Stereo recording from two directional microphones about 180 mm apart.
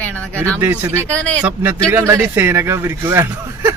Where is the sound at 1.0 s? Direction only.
10° left (ahead or behind).